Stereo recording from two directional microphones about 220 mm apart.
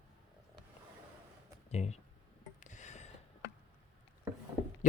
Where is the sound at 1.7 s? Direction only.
30° left (ahead or behind).